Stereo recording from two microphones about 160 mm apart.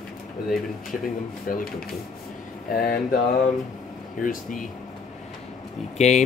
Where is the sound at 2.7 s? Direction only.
65° left (ahead or behind).